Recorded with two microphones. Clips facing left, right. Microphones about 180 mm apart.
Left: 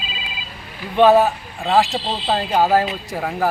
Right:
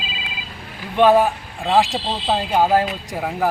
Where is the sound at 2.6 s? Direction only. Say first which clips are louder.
Left 1 dB; 5° left (ahead or behind).